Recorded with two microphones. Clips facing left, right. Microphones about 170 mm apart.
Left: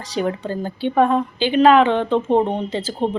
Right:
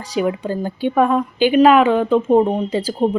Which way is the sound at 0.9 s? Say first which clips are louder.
Even; 30° left (ahead or behind).